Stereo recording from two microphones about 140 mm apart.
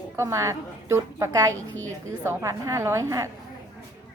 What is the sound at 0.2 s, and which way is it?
A woman's voice, 20° right (ahead or behind).